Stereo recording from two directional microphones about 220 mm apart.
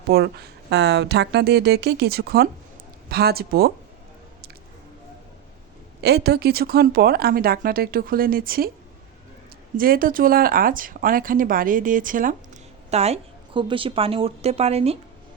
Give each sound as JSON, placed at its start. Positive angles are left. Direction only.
{"t": 0.1, "sound": "speech", "side_deg": -45}
{"t": 6.0, "sound": "speech", "side_deg": -50}
{"t": 9.7, "sound": "a woman's voice", "side_deg": -40}